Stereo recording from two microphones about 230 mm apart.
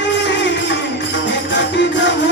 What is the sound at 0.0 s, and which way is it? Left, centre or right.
Music, left.